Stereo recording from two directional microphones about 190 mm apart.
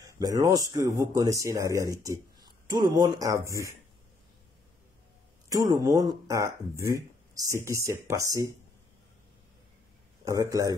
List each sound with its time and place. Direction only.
0.2 s speech: 20° right (ahead or behind)
5.5 s speech: 20° right (ahead or behind)
10.2 s speech: 15° right (ahead or behind)